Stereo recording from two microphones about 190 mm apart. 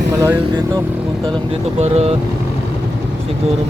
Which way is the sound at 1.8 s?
35° right (ahead or behind).